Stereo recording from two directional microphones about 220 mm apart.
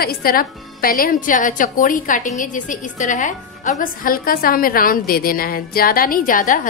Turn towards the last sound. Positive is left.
turn(degrees=40)  # may be behind; listen again after turning